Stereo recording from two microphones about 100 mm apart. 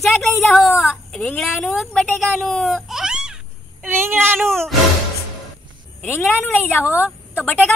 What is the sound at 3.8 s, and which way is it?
Child singing, 20° right (ahead or behind).